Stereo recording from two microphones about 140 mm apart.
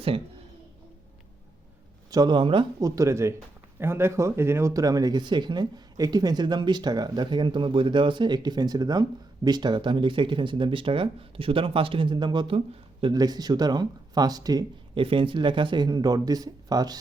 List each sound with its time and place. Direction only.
2.0 s speech: 30° right (ahead or behind)
2.8 s speech: 25° right (ahead or behind); by 13.1 s 40° right (ahead or behind)
13.1 s speech: 30° right (ahead or behind)
14.9 s speech: 40° right (ahead or behind)